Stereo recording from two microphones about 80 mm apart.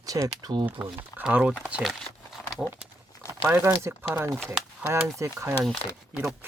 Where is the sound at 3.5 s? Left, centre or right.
Right.